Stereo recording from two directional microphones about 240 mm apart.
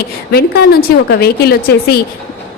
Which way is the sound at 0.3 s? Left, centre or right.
Left.